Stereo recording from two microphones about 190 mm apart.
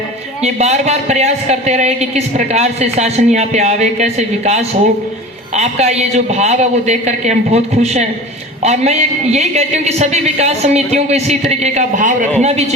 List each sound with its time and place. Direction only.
0.4 s speech: 35° right (ahead or behind)